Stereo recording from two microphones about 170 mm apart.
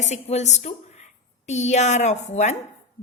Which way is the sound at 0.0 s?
40° left (ahead or behind).